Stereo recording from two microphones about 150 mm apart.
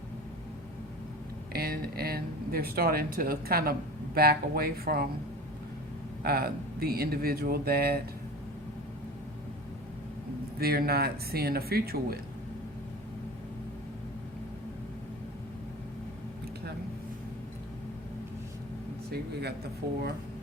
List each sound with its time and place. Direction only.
1.5 s speech: 90° right
6.2 s speech: 90° right
10.6 s speech: 90° right
19.1 s speech: 90° right